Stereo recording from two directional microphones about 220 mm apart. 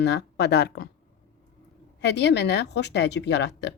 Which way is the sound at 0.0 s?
50° left (ahead or behind).